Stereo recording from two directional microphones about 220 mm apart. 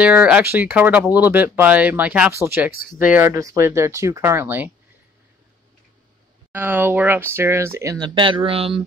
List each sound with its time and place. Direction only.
0.0 s speech: 5° right (ahead or behind)
2.7 s speech: 40° left (ahead or behind)
3.1 s speech: 10° right (ahead or behind)
6.5 s speech: 10° right (ahead or behind); by 8.8 s 25° right (ahead or behind)